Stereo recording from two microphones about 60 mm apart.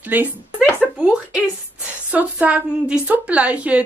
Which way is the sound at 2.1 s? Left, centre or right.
Right.